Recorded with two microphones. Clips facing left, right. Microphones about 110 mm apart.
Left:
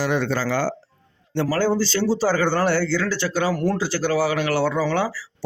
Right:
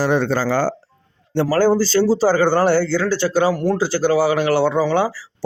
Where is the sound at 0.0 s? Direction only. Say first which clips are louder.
Right 4 dB; 35° right (ahead or behind).